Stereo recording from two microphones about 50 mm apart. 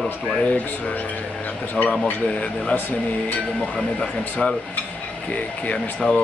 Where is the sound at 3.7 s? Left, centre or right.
Centre.